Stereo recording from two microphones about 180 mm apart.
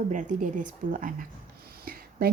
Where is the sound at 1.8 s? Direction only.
55° right (ahead or behind).